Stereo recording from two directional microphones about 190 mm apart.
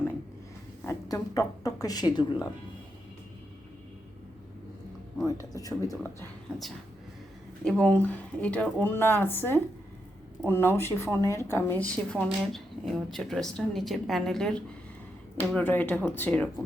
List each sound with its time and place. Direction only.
0.9 s speech: 20° left (ahead or behind)
5.2 s speech: 20° left (ahead or behind)
7.6 s speech: 5° left (ahead or behind)